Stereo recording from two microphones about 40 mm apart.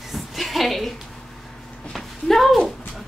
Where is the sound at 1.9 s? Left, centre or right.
Centre.